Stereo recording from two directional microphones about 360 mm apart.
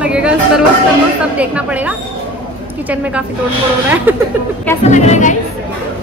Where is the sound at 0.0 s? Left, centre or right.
Centre.